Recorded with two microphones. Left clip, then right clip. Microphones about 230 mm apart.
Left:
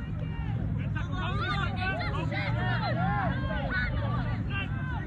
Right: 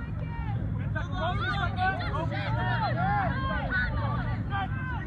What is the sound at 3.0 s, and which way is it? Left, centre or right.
Vehicle, centre.